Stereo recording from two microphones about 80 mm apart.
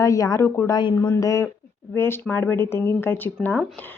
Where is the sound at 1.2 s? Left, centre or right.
Left.